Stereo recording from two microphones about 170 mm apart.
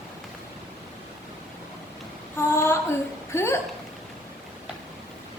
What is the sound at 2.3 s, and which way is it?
Child singing, 15° left (ahead or behind).